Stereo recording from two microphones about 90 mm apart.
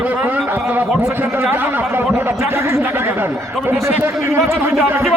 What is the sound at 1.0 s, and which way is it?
Speech, 25° right (ahead or behind).